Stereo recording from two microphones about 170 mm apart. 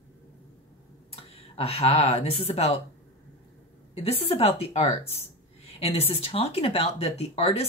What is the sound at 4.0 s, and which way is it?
Speech, 35° left (ahead or behind).